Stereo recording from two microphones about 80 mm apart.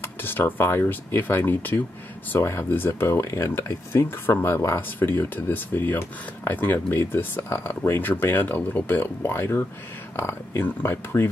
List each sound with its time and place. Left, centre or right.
0.0 s speech: left